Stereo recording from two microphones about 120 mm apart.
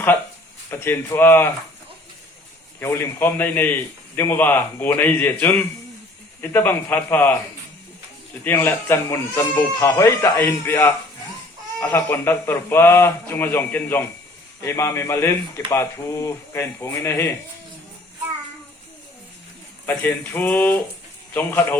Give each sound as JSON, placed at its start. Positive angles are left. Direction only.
{"t": 0.7, "sound": "a man's voice", "side_deg": 20}
{"t": 2.8, "sound": "a man's voice", "side_deg": 20}
{"t": 8.4, "sound": "a man's voice", "side_deg": 20}
{"t": 19.8, "sound": "a man's voice", "side_deg": 15}